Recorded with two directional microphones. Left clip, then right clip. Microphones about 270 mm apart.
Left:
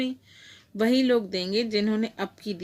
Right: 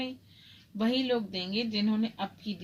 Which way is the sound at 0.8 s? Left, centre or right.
Left.